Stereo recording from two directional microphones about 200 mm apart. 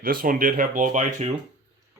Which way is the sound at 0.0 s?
45° right (ahead or behind).